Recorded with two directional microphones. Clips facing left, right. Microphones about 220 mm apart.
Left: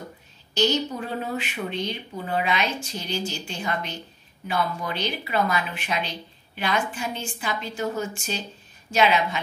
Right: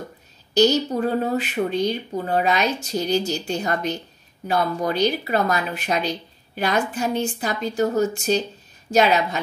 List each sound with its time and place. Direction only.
0.6 s speech: 40° right (ahead or behind)